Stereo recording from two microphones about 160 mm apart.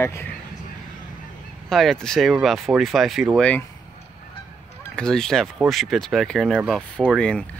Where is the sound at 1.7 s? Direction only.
5° left (ahead or behind).